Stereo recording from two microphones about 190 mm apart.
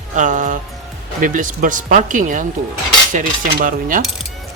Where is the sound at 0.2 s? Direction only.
40° right (ahead or behind).